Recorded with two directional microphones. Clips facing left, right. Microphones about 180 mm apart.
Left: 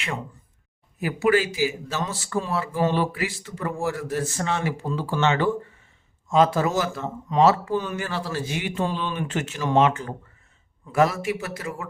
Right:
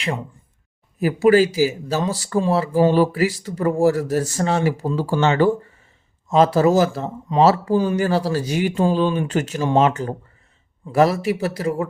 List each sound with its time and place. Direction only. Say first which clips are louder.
0.9 s speech: right 7 dB; 35° right (ahead or behind)